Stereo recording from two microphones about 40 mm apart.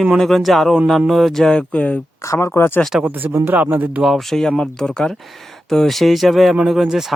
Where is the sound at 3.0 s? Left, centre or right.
Right.